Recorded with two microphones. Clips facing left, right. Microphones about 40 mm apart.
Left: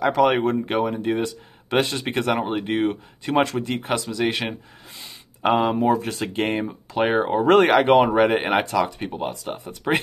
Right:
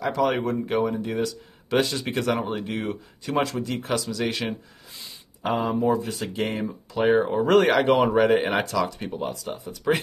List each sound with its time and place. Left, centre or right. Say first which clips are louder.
0.0 s speech: left 5 dB; left
3.6 s speech: left 2 dB; left
4.3 s a sound: left 3 dB; left
5.5 s speech: left 4 dB; left
6.3 s speech: left 4 dB; left
7.1 s speech: left 1 dB; left